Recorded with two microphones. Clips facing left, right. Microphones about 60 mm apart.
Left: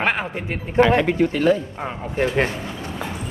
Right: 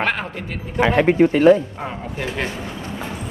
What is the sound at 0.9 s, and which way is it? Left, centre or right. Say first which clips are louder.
Speech: right 4 dB; right.